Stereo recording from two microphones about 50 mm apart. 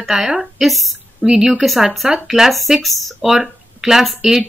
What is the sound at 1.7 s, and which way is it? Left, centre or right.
Speech, centre.